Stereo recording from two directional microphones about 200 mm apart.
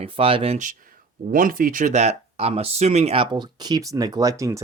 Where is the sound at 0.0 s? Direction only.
30° right (ahead or behind).